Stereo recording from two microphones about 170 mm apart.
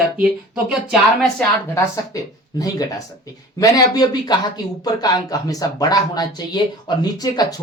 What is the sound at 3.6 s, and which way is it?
Speech, 25° left (ahead or behind).